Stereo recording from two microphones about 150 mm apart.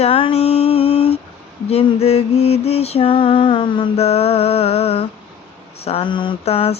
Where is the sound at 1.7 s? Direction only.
40° left (ahead or behind).